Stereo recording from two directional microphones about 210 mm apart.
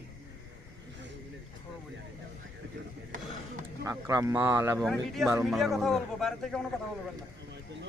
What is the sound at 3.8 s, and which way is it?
Speech, 15° right (ahead or behind).